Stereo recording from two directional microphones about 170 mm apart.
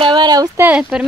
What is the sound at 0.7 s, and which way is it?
Speech, 5° right (ahead or behind).